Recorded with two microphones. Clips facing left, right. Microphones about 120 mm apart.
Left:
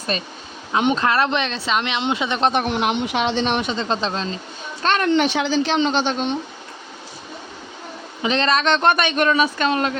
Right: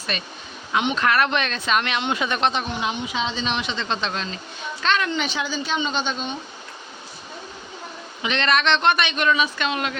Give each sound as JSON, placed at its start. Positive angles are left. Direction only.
{"t": 0.1, "sound": "speech", "side_deg": 35}
{"t": 2.5, "sound": "a woman's voice", "side_deg": 65}
{"t": 4.8, "sound": "a woman's voice", "side_deg": 45}
{"t": 8.2, "sound": "speech", "side_deg": 35}